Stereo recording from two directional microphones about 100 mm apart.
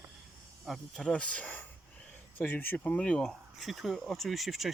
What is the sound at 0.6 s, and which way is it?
Speech, 5° left (ahead or behind).